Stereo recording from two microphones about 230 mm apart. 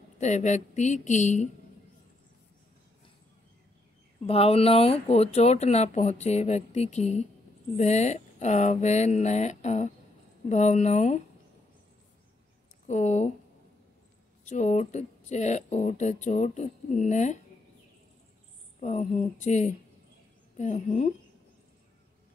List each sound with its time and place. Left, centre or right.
0.2 s speech: left
4.2 s speech: left
12.8 s speech: left
14.4 s speech: left
18.8 s speech: left